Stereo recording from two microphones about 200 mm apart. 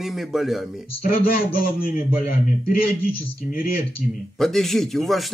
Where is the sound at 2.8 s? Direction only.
45° left (ahead or behind).